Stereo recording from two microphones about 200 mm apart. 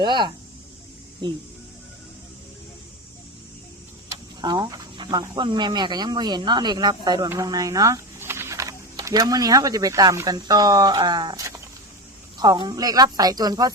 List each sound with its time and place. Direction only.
0.0 s a woman's voice: 20° right (ahead or behind)
4.4 s a woman's voice: 20° right (ahead or behind)